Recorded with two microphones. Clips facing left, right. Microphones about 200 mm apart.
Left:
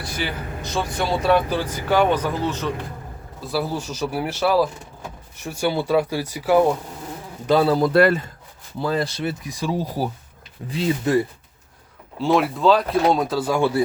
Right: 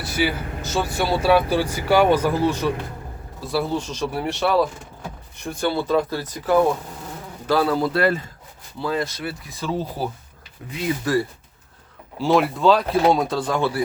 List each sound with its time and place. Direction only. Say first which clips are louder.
0.0 s speech: right 5 dB; 5° right (ahead or behind)
3.4 s speech: right 1 dB; centre (ahead or behind)
7.4 s speech: left 3 dB; 25° left (ahead or behind)
7.9 s a man's voice: left 6 dB; 65° left (ahead or behind)
8.8 s speech: left 2 dB; 35° left (ahead or behind); by 10.1 s 10° left (ahead or behind)
10.7 s speech: left 2 dB; 30° left (ahead or behind)
12.2 s speech: right 1 dB; centre (ahead or behind)